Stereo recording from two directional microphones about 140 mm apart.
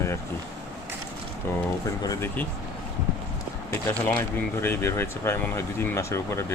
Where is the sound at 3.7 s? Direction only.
15° left (ahead or behind).